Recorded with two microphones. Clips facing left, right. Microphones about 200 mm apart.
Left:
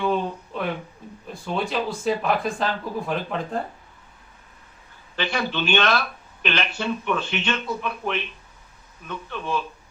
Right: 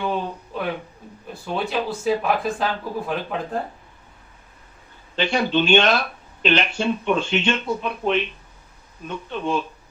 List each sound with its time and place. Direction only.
0.0 s a sound: centre (ahead or behind)
1.3 s speech: centre (ahead or behind)
5.1 s speech: 25° right (ahead or behind)